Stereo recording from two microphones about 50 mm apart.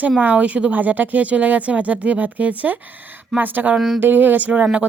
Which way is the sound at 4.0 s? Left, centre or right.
Right.